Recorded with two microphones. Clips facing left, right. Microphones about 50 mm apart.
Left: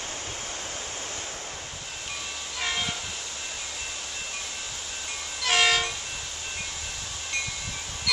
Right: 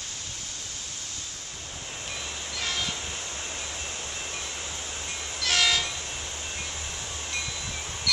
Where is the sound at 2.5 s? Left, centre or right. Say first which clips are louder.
Left 2 dB; centre.